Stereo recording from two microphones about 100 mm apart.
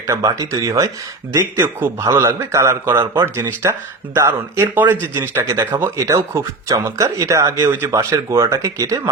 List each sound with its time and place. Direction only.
0.1 s speech: 35° right (ahead or behind)
1.4 s speech: 20° right (ahead or behind)